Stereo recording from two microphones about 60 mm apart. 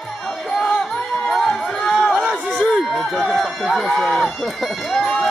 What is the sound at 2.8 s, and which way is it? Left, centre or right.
Speech, centre.